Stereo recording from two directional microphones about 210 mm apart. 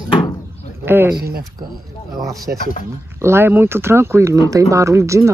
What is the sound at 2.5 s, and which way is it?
Speech, 10° right (ahead or behind).